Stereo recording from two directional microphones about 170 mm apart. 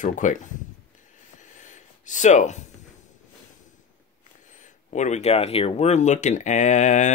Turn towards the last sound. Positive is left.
turn(degrees=45)  # may be behind; listen again after turning